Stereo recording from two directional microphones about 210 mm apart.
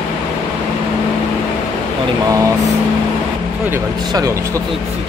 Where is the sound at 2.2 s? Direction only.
15° right (ahead or behind).